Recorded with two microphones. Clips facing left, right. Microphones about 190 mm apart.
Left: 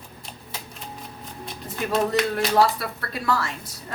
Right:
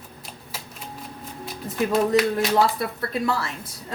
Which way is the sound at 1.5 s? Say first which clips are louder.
Right 4 dB; 5° right (ahead or behind).